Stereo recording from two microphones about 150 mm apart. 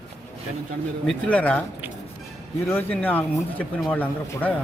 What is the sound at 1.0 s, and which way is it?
Speech, 5° left (ahead or behind).